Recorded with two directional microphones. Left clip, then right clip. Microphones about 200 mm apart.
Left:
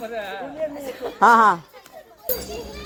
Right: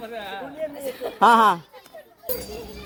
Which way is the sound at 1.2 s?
15° right (ahead or behind).